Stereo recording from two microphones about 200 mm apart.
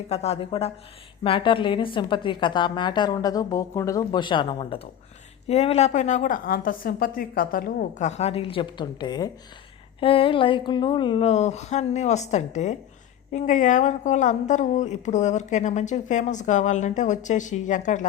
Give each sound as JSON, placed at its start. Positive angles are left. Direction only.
{"t": 0.1, "sound": "a woman's voice", "side_deg": 30}